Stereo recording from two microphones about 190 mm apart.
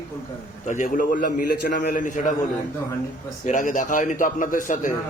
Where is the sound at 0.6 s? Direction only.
40° left (ahead or behind).